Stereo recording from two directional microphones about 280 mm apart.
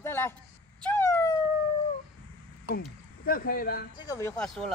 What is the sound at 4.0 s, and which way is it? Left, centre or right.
Speech, centre.